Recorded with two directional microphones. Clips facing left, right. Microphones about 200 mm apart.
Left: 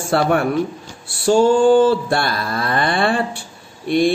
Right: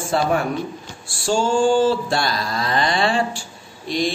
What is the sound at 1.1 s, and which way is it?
Mantra, 60° left (ahead or behind).